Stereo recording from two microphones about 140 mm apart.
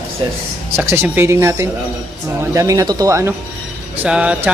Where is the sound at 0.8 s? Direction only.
15° right (ahead or behind).